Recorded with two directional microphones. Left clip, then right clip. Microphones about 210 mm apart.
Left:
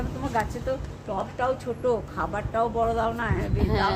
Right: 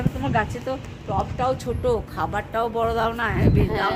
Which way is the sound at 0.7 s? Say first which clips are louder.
Right 2 dB; 50° right (ahead or behind).